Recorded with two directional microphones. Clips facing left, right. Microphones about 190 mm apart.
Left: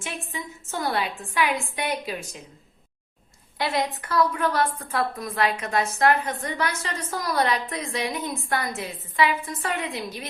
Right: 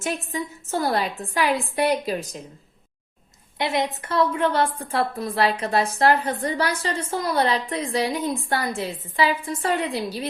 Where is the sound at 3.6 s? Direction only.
20° right (ahead or behind).